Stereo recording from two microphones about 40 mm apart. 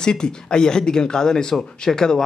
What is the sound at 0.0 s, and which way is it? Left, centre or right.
Speech, centre.